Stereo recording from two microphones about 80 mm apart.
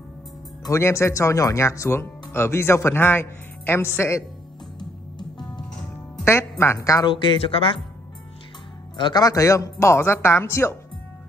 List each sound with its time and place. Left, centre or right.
0.7 s speech: left
6.6 s speech: left
7.1 s speech: left
8.9 s speech: left
9.2 s speech: left